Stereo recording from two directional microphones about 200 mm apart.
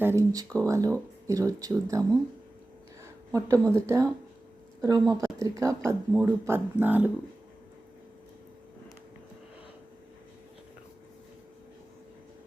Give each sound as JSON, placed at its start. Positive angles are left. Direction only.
{"t": 0.0, "sound": "a woman's voice", "side_deg": -15}